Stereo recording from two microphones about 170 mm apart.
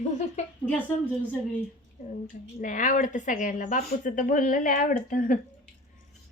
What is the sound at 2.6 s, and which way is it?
Speech, 50° left (ahead or behind).